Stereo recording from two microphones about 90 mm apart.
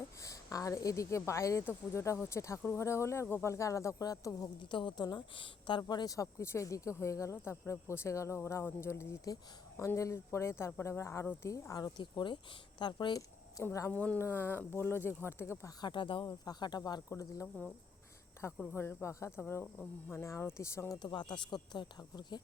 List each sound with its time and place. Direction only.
0.2 s a woman's voice: 40° left (ahead or behind)
4.6 s a woman's voice: 60° left (ahead or behind)
6.1 s a woman's voice: 30° left (ahead or behind); by 13.1 s 55° left (ahead or behind)
13.6 s speech: 25° left (ahead or behind)
13.9 s speech: 15° left (ahead or behind)
15.8 s speech: 65° left (ahead or behind)
16.2 s speech: 50° left (ahead or behind)
18.4 s speech: 30° left (ahead or behind)
21.0 s a woman's voice: 55° left (ahead or behind)